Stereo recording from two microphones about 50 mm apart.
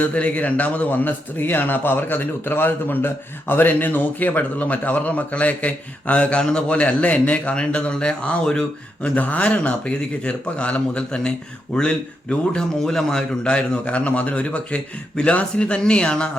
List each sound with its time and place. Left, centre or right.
0.0 s a man's voice: left
9.1 s speech: left; by 13.2 s centre
13.4 s speech: left